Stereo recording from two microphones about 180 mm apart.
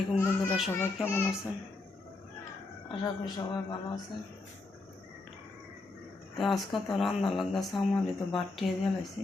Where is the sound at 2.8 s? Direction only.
25° left (ahead or behind).